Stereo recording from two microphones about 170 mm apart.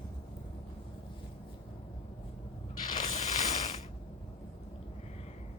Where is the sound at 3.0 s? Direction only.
45° left (ahead or behind).